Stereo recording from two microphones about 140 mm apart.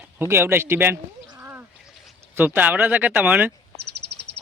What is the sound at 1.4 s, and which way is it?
Splash, 15° right (ahead or behind).